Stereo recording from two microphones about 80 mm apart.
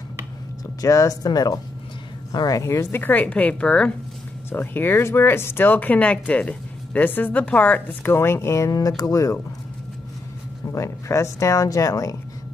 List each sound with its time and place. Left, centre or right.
0.7 s speech: left
2.6 s speech: left; by 3.9 s centre
4.5 s speech: left
8.7 s speech: left
10.7 s speech: left